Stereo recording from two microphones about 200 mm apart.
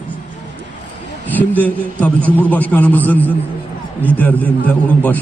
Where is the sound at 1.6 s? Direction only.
5° left (ahead or behind).